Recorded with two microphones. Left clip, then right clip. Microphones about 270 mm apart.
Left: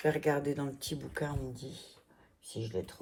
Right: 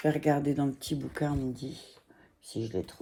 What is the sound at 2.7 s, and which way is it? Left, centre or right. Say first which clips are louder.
Speech: right 1 dB; right.